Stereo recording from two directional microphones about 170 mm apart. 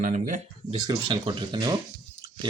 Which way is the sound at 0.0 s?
45° right (ahead or behind).